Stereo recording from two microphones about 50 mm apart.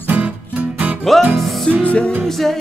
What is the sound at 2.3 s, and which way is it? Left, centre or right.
Music, centre.